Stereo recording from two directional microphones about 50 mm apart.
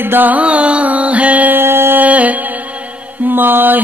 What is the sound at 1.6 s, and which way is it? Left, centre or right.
Music, right.